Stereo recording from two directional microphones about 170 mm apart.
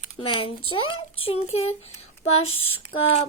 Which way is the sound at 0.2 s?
30° left (ahead or behind).